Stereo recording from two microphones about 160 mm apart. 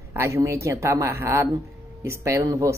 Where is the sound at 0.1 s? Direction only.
15° right (ahead or behind).